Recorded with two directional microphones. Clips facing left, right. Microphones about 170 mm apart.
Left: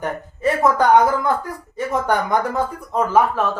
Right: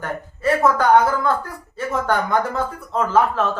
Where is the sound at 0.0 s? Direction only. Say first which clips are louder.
Left 2 dB; 15° left (ahead or behind).